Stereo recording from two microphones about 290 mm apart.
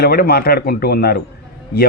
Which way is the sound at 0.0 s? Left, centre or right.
Left.